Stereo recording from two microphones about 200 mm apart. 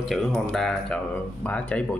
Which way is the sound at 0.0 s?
Centre (ahead or behind).